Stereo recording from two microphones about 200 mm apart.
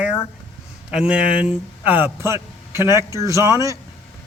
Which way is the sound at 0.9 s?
5° right (ahead or behind).